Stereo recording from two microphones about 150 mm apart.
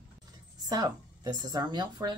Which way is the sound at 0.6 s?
25° right (ahead or behind).